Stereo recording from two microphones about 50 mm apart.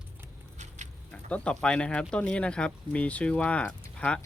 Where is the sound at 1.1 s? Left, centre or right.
Left.